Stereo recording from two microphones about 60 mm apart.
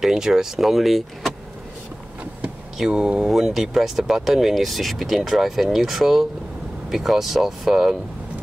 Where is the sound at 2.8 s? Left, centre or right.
Centre.